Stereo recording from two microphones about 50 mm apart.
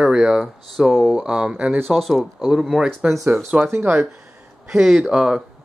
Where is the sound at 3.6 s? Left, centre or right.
Right.